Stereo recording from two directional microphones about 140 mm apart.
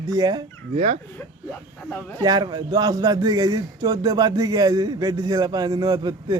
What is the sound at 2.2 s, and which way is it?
A man's voice, 30° right (ahead or behind).